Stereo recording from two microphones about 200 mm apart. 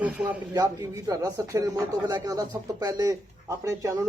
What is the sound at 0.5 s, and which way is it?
A man's voice, 15° right (ahead or behind).